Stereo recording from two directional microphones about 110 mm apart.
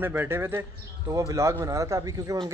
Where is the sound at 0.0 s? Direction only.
20° right (ahead or behind).